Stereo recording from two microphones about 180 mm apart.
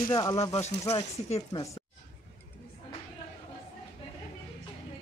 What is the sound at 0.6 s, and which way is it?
Speech, 35° left (ahead or behind).